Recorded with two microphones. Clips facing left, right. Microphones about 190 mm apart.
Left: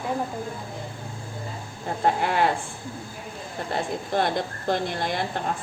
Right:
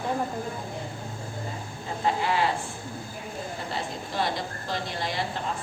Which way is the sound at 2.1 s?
55° left (ahead or behind).